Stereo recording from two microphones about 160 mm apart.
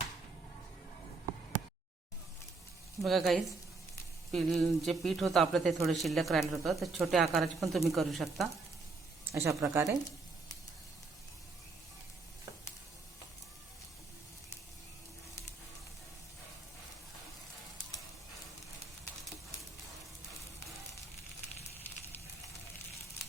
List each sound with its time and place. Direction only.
3.0 s speech: centre (ahead or behind)
9.3 s a woman's voice: 20° right (ahead or behind)